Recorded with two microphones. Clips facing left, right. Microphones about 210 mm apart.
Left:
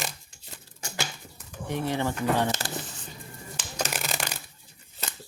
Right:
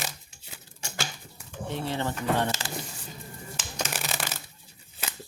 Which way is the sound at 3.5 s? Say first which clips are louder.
Left 2 dB; centre (ahead or behind).